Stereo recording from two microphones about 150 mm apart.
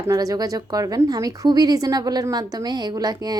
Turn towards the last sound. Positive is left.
turn(degrees=-25)  # may be behind; listen again after turning